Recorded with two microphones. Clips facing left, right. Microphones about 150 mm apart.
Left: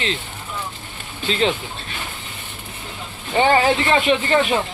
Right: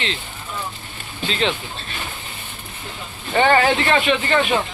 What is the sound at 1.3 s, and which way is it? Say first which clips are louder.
Speech: left 2 dB; 35° left (ahead or behind).